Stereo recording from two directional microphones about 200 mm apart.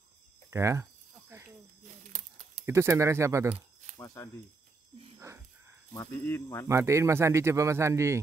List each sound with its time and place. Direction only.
0.5 s speech: 15° right (ahead or behind)
2.1 s a sound: 35° right (ahead or behind)
2.6 s a man's voice: 15° right (ahead or behind)
4.0 s speech: 15° left (ahead or behind)
5.9 s speech: 10° left (ahead or behind)
6.7 s a man's voice: 15° right (ahead or behind)